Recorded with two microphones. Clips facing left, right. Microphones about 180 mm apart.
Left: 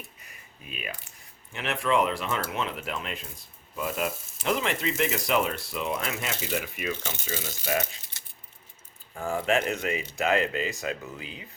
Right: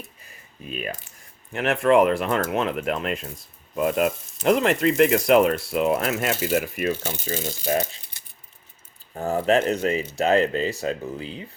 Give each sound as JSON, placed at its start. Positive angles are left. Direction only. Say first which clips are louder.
{"t": 0.6, "sound": "speech", "louder": "right 8 dB", "side_deg": -40}
{"t": 1.5, "sound": "speech", "louder": "right 8 dB", "side_deg": -55}
{"t": 7.7, "sound": "speech", "louder": "right 5 dB", "side_deg": -35}
{"t": 9.1, "sound": "speech", "louder": "right 6 dB", "side_deg": -40}